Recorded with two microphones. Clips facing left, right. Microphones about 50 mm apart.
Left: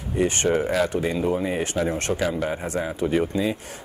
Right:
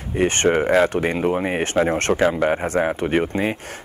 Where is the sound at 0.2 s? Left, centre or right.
Right.